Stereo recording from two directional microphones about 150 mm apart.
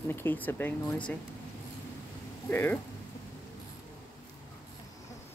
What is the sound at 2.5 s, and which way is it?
Speech, 15° left (ahead or behind).